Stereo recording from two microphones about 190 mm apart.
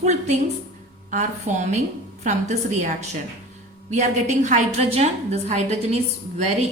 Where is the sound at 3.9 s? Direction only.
40° right (ahead or behind).